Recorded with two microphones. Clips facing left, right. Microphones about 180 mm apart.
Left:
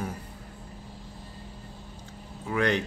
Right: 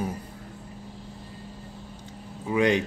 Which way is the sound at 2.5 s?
15° right (ahead or behind).